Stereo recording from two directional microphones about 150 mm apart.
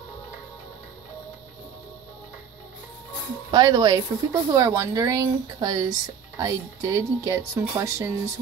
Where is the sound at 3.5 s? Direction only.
25° right (ahead or behind).